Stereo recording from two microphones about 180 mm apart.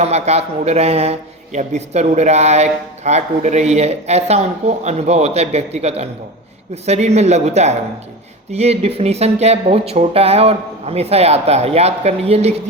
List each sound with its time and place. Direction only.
0.0 s speech: 35° right (ahead or behind)